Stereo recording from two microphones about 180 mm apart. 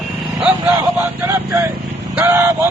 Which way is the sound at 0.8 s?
15° right (ahead or behind).